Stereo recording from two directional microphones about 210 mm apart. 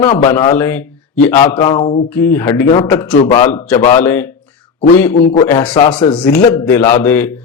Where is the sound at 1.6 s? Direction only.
25° left (ahead or behind).